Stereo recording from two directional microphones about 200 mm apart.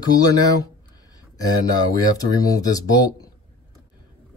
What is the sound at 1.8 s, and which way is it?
Speech, 20° left (ahead or behind).